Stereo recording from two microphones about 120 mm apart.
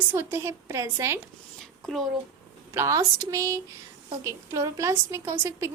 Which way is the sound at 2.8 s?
25° right (ahead or behind).